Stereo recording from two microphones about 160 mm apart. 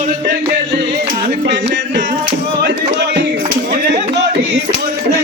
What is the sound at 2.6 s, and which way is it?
Music, 90° right.